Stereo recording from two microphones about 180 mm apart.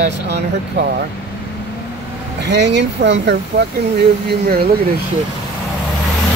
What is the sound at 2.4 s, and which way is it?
Speech, 75° right (ahead or behind).